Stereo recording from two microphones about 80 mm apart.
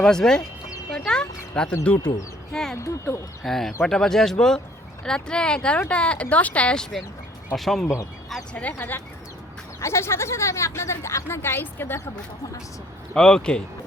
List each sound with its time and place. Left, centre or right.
0.0 s speech: centre
1.0 s a sound: centre
2.7 s speech: left
3.4 s speech: centre
7.5 s speech: centre
8.5 s speech: left
9.8 s speech: left
13.1 s speech: centre